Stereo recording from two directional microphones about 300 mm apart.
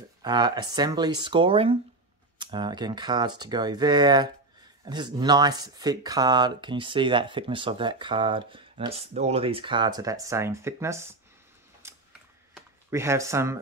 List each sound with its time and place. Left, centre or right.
0.2 s speech: centre
11.8 s a sound: centre
12.9 s speech: centre